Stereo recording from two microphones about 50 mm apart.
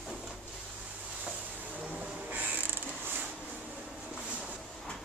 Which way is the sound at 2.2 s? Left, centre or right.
Right.